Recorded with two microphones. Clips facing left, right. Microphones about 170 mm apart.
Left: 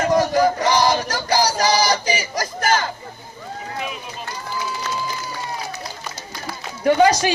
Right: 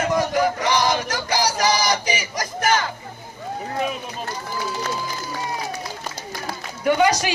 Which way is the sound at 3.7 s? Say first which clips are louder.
Right 5 dB; 45° right (ahead or behind).